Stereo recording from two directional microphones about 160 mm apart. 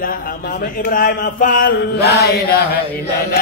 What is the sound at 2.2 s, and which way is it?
Chant, 75° left (ahead or behind).